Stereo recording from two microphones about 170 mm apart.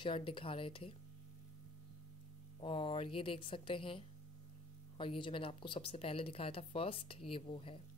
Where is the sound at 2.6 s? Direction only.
30° left (ahead or behind).